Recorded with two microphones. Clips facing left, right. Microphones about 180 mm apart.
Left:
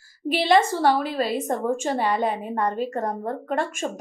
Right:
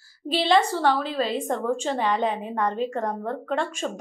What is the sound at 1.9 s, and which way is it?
A woman's voice, 10° left (ahead or behind).